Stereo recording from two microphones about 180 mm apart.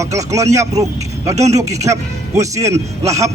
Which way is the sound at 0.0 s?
15° right (ahead or behind).